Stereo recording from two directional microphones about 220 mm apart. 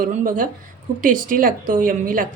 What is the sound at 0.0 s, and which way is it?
A woman's voice, 40° right (ahead or behind).